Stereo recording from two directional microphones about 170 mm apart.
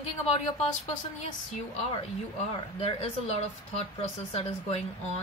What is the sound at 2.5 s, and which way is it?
Speech, 35° left (ahead or behind).